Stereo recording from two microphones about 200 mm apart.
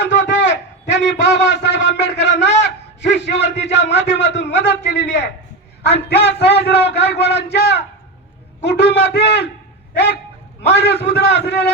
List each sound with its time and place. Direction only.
0.0 s a sound: 60° left (ahead or behind)
5.8 s a man's voice: 55° left (ahead or behind)
10.7 s a man's voice: 55° left (ahead or behind)